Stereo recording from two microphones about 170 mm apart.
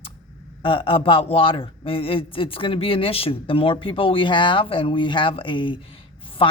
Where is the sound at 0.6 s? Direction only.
30° left (ahead or behind).